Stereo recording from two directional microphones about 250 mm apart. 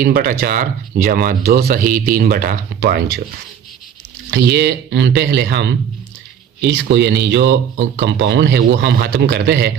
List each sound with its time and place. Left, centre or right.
0.0 s speech: right
4.3 s speech: right